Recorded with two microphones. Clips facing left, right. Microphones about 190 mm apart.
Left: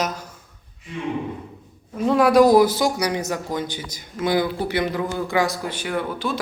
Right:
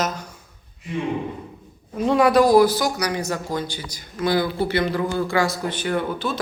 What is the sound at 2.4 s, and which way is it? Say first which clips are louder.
Speech: even; 20° left (ahead or behind).